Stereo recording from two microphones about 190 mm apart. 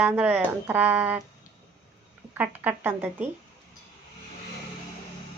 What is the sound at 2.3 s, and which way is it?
Speech, 10° right (ahead or behind).